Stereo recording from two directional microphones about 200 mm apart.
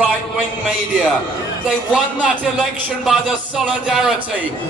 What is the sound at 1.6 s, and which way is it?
Speech, 5° right (ahead or behind).